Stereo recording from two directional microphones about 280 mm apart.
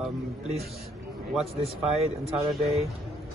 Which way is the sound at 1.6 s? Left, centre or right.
Right.